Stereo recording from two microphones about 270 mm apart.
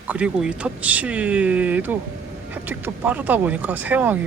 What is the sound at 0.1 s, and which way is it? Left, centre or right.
Speech, centre.